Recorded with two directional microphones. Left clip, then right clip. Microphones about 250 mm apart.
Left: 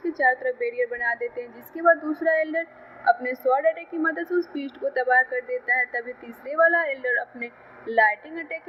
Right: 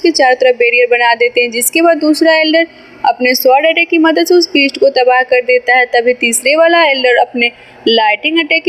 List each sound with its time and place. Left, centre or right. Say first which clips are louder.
0.0 s a woman's voice: right 14 dB; right